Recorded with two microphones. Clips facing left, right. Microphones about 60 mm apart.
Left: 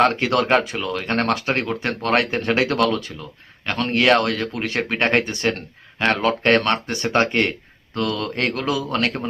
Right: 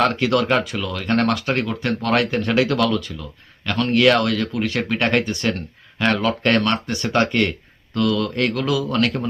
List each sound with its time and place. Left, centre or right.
0.0 s speech: left
3.7 s speech: left